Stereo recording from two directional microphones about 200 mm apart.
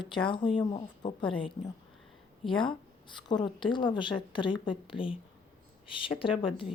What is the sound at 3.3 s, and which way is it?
Speech, 20° left (ahead or behind).